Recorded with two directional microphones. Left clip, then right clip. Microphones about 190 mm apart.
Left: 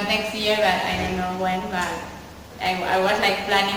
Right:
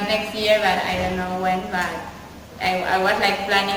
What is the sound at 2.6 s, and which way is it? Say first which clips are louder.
A woman's voice: right 1 dB; centre (ahead or behind).